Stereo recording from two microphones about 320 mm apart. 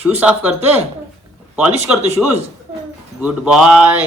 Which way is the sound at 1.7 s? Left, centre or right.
Centre.